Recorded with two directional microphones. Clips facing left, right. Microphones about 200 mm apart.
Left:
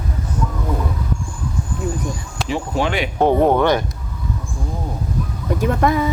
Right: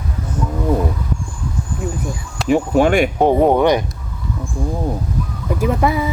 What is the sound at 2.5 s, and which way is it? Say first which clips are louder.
Speech: right 8 dB; 50° right (ahead or behind).